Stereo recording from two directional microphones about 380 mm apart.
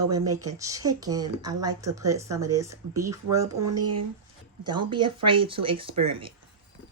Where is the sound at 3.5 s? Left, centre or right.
Right.